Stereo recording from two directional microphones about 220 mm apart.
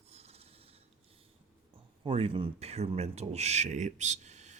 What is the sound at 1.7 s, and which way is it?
Speech, 25° right (ahead or behind).